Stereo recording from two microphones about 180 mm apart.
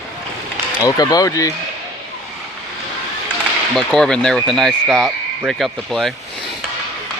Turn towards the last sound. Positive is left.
turn(degrees=0)  # may be behind; listen again after turning